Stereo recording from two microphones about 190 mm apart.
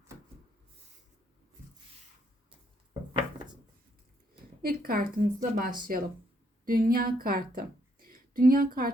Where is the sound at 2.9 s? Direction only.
25° right (ahead or behind).